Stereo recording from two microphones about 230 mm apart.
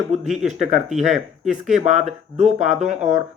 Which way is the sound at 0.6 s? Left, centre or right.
Centre.